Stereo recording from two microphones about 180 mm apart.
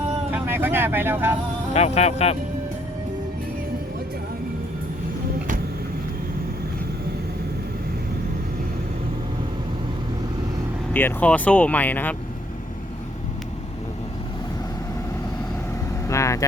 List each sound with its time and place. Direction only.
0.3 s speech: 10° right (ahead or behind)
1.7 s speech: 35° left (ahead or behind)
10.9 s speech: 10° left (ahead or behind)
16.0 s vehicle: 15° left (ahead or behind)